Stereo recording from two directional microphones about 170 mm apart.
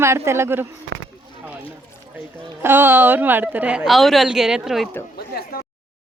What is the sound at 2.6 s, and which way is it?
A woman's voice, 15° right (ahead or behind).